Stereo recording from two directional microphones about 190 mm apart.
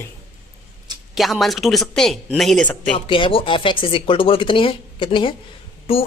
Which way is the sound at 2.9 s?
25° left (ahead or behind).